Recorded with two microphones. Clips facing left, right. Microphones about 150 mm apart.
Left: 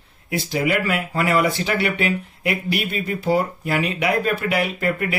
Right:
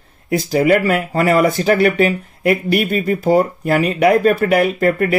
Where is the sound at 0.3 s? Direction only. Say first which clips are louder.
Right 8 dB; 45° right (ahead or behind).